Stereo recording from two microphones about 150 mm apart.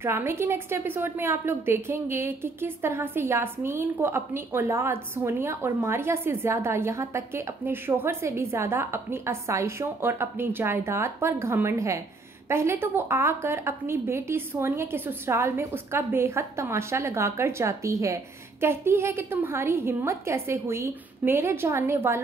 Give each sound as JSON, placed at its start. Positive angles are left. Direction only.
{"t": 0.0, "sound": "a woman's voice", "side_deg": -15}